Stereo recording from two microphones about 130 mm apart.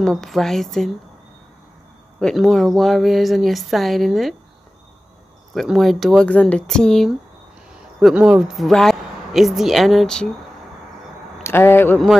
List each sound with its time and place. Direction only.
0.0 s speech: 5° left (ahead or behind)
2.1 s speech: 5° left (ahead or behind)
5.5 s speech: centre (ahead or behind)
11.4 s speech: 20° left (ahead or behind)